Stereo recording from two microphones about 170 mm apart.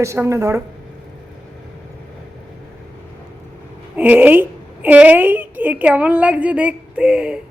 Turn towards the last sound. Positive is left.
turn(degrees=-5)  # may be behind; listen again after turning